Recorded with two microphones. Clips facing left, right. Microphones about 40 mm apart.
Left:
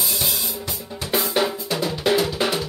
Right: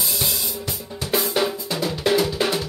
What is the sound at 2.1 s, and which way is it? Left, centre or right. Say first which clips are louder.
Drum: even; centre.